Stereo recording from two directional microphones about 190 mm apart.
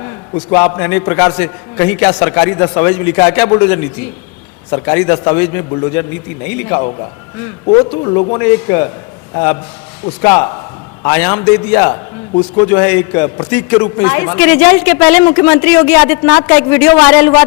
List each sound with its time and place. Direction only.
0.7 s speech: 15° left (ahead or behind)
7.7 s a man's voice: 25° left (ahead or behind)
10.2 s speech: 15° left (ahead or behind)
11.9 s a man's voice: 25° left (ahead or behind)
12.5 s speech: 15° left (ahead or behind)